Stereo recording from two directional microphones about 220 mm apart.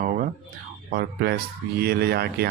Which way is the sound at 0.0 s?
35° right (ahead or behind).